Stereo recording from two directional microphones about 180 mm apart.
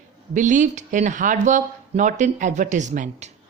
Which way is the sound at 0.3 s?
45° right (ahead or behind).